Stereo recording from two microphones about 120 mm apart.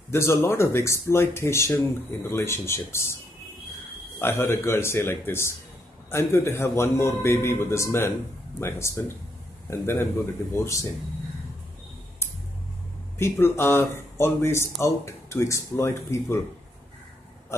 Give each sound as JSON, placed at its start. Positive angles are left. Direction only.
{"t": 0.1, "sound": "speech", "side_deg": 20}
{"t": 4.2, "sound": "speech", "side_deg": 20}
{"t": 13.2, "sound": "speech", "side_deg": 20}